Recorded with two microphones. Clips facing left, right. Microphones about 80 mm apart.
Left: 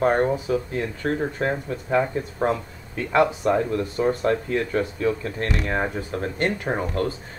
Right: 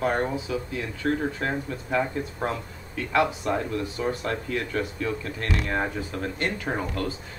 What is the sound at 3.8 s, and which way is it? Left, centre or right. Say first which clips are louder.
Speech: left 6 dB; left.